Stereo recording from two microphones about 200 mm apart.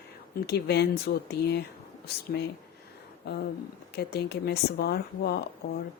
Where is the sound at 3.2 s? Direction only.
55° left (ahead or behind).